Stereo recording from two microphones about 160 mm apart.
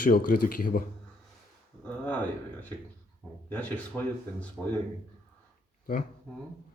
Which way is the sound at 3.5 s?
10° left (ahead or behind).